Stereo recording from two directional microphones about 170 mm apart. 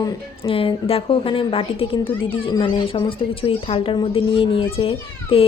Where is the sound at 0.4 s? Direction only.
30° left (ahead or behind).